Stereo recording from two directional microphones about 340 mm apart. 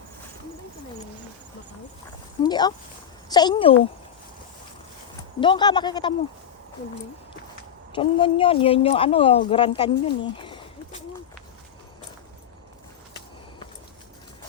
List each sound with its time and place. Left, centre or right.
2.4 s speech: centre
5.4 s speech: centre
7.9 s speech: centre